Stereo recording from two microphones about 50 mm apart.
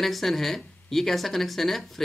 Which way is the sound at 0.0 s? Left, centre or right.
Centre.